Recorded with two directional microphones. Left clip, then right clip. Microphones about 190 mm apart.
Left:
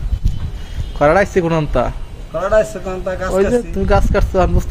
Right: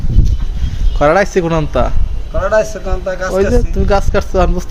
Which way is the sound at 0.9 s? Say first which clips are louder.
Right 2 dB; 5° right (ahead or behind).